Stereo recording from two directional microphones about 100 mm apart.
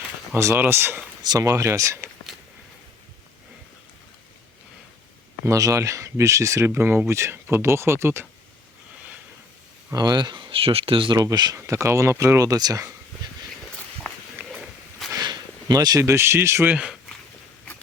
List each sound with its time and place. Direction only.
0.3 s speech: 25° right (ahead or behind)
1.2 s speech: 40° right (ahead or behind)
5.5 s speech: 35° right (ahead or behind)
9.9 s speech: 40° right (ahead or behind); by 11.2 s 60° right (ahead or behind)
11.2 s speech: 40° right (ahead or behind)
14.3 s walk: 5° right (ahead or behind)
15.1 s a sound: 40° right (ahead or behind)
16.0 s speech: 25° right (ahead or behind)